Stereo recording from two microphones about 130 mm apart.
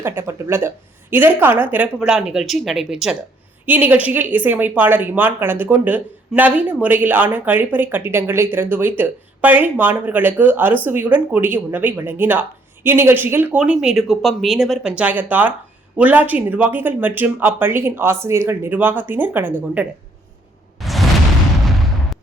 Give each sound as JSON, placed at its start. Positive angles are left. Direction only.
{"t": 0.0, "sound": "a woman's voice", "side_deg": -20}
{"t": 3.7, "sound": "a woman's voice", "side_deg": -15}
{"t": 20.7, "sound": "a sound", "side_deg": 0}